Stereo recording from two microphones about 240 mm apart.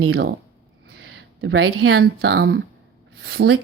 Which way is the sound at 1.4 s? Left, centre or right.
Right.